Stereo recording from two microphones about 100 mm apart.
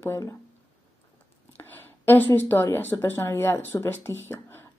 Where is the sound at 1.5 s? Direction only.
20° left (ahead or behind).